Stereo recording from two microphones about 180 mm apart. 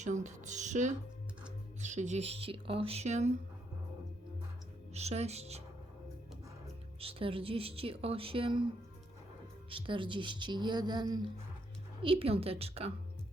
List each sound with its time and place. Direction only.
0.0 s a woman's voice: 40° right (ahead or behind)
4.9 s a woman's voice: 35° right (ahead or behind)
7.0 s a woman's voice: 30° right (ahead or behind)
9.6 s a woman's voice: 30° right (ahead or behind)